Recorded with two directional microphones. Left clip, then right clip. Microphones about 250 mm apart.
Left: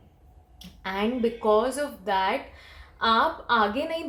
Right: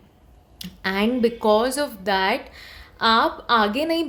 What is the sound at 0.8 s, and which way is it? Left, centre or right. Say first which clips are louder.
A woman's voice: right 6 dB; right.